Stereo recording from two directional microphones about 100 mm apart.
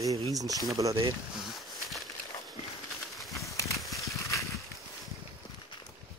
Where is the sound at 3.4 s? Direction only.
30° left (ahead or behind).